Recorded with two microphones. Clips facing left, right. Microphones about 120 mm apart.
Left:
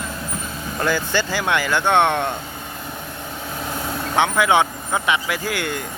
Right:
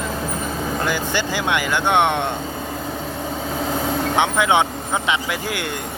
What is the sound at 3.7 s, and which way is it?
Vehicle, 90° right.